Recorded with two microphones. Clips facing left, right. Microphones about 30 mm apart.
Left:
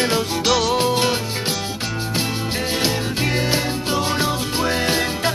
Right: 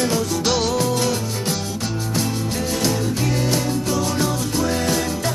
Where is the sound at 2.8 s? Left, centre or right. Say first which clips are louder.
Even; left.